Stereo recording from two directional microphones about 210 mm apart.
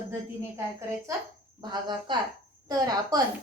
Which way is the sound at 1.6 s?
20° right (ahead or behind).